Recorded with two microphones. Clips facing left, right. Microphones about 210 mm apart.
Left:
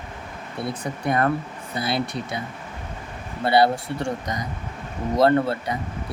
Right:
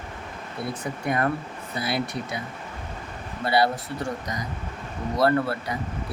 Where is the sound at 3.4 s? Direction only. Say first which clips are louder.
Left 4 dB; 25° left (ahead or behind).